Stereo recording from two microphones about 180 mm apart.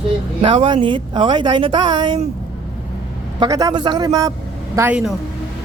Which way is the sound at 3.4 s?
20° right (ahead or behind).